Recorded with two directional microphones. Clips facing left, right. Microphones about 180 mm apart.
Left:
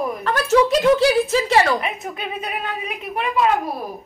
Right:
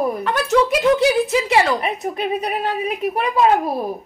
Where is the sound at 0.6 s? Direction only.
10° left (ahead or behind).